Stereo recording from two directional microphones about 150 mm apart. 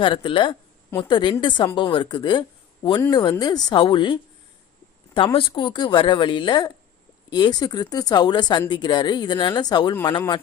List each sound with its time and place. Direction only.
0.0 s speech: 35° left (ahead or behind)